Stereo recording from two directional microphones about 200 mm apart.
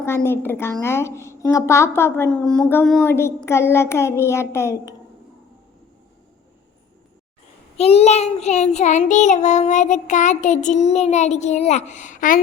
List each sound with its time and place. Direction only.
0.3 s a woman's voice: 10° left (ahead or behind)
7.8 s child singing: 30° left (ahead or behind)